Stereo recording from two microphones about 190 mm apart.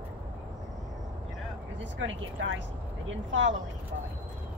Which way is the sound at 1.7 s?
85° right.